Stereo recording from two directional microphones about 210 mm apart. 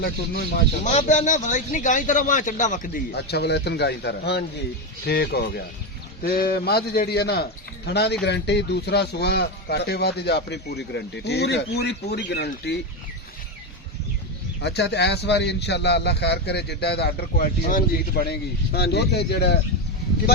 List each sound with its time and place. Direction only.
0.0 s speech: 50° left (ahead or behind)
0.9 s speech: 35° left (ahead or behind); by 12.7 s 55° left (ahead or behind)
14.6 s speech: 50° left (ahead or behind)